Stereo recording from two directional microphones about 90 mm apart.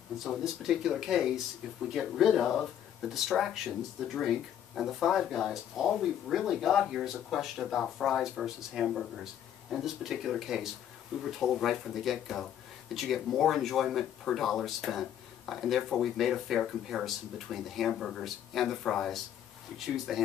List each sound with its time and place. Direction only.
0.2 s speech: centre (ahead or behind)